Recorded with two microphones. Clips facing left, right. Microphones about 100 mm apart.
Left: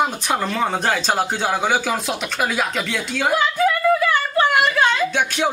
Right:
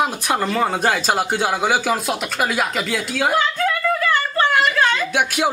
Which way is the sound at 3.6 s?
15° left (ahead or behind).